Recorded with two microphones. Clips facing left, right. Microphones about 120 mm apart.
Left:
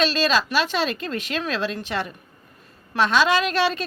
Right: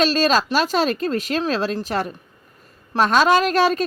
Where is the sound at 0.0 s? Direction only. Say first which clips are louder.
Right 3 dB; 40° right (ahead or behind).